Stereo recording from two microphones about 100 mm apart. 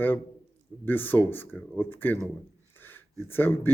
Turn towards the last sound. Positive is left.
turn(degrees=20)  # may be behind; listen again after turning